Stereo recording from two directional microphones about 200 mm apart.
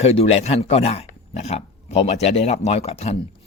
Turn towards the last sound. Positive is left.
turn(degrees=30)  # may be behind; listen again after turning